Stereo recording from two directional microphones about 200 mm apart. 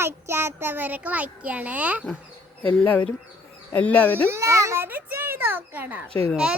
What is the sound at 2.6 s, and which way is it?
Speech, 10° left (ahead or behind).